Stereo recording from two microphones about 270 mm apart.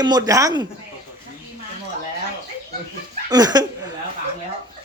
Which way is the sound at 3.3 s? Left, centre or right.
Centre.